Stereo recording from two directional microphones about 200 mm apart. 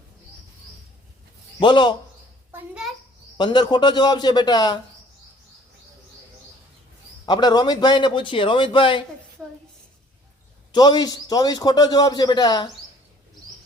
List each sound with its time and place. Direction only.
1.5 s a man's voice: 25° left (ahead or behind)
2.5 s a sound: 5° right (ahead or behind)
3.3 s a man's voice: 20° left (ahead or behind)
7.3 s a man's voice: 20° left (ahead or behind)
10.7 s a man's voice: 20° left (ahead or behind)